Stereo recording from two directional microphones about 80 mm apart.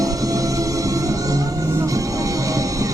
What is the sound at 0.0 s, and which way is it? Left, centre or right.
Music, right.